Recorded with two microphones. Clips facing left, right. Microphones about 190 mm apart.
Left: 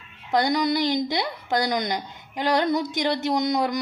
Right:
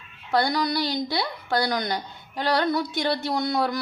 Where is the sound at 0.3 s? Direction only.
20° left (ahead or behind).